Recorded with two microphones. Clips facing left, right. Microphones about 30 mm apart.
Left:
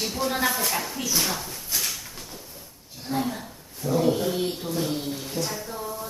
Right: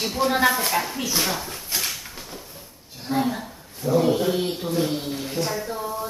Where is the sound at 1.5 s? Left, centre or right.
Right.